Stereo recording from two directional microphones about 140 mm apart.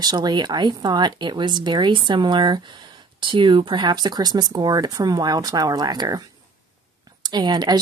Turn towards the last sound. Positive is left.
turn(degrees=-30)  # may be behind; listen again after turning